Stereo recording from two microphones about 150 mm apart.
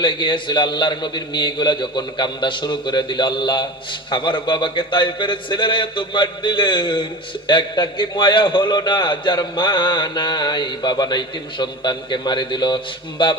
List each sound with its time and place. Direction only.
0.0 s a man's voice: 30° left (ahead or behind)